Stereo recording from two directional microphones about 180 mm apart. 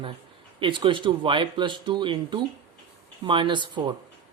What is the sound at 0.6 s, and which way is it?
Speech, 25° right (ahead or behind).